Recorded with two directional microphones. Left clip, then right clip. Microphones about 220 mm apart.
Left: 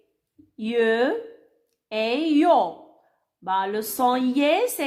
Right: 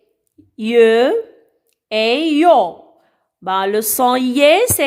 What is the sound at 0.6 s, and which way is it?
A woman's voice, 30° right (ahead or behind).